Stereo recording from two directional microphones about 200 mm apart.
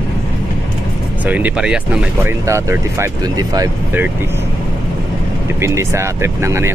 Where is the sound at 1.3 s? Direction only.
5° right (ahead or behind).